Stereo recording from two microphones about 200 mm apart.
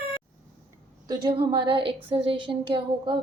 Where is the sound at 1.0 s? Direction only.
25° right (ahead or behind).